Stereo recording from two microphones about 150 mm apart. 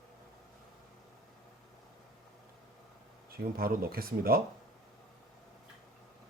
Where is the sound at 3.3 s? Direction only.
80° right.